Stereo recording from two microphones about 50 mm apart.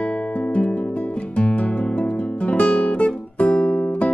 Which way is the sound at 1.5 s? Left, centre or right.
Left.